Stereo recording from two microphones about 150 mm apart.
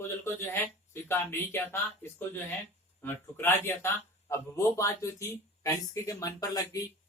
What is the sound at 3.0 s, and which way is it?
Speech, 15° left (ahead or behind).